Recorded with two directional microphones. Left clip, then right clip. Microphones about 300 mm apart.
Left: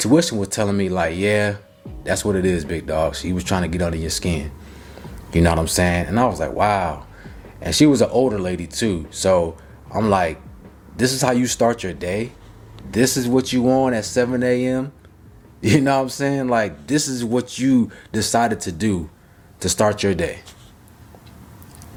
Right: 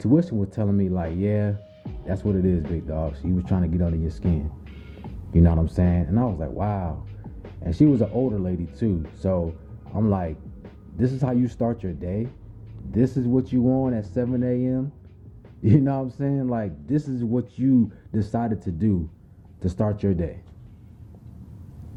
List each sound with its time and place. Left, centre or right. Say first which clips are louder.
0.0 s speech: left 6 dB; centre
8.0 s speech: left 8 dB; centre
8.4 s speech: left 6 dB; centre